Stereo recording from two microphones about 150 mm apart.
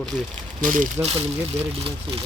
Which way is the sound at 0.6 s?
60° right (ahead or behind).